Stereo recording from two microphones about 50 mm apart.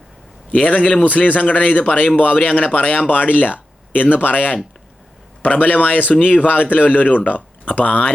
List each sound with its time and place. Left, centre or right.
0.5 s a man's voice: left